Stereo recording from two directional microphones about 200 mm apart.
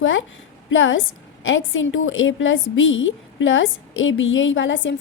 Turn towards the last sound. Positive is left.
turn(degrees=70)  # may be behind; listen again after turning